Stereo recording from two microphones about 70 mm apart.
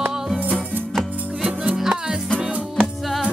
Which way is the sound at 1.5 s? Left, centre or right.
Centre.